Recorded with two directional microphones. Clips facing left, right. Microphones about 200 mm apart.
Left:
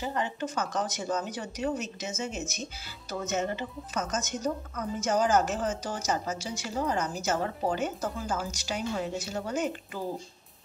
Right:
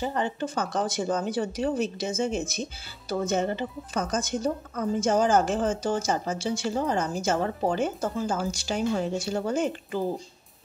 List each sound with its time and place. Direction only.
0.0 s speech: 35° right (ahead or behind)